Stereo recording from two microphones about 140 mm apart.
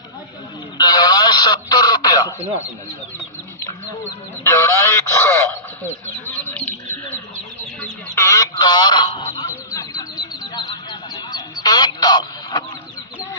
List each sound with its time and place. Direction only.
0.8 s radio: 30° left (ahead or behind)
4.4 s speech: 20° left (ahead or behind)
6.2 s bird: 15° left (ahead or behind)
7.8 s speech: 15° left (ahead or behind)
9.1 s a sound: 25° left (ahead or behind)